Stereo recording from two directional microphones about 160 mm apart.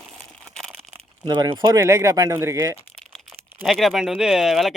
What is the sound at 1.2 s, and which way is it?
Speech, 30° right (ahead or behind).